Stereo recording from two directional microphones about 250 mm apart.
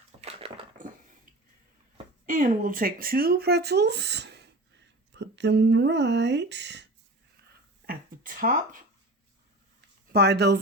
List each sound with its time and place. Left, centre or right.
0.2 s dog: right
2.2 s speech: right
7.9 s a sound: right
10.1 s speech: right